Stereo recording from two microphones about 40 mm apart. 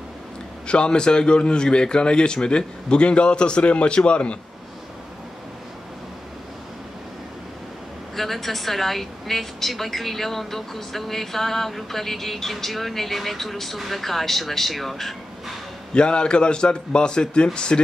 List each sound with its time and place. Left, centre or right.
0.7 s a man's voice: left
8.2 s a woman's voice: centre
15.9 s a man's voice: left